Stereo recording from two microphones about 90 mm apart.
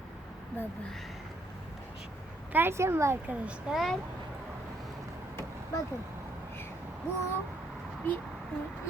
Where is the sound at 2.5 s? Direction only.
25° right (ahead or behind).